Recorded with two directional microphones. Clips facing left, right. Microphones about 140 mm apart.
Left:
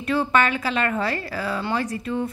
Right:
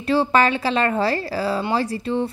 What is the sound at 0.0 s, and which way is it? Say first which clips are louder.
Speech: right 3 dB; 30° right (ahead or behind).